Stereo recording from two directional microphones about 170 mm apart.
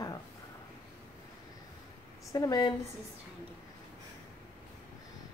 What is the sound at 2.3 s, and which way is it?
Speech, 20° left (ahead or behind).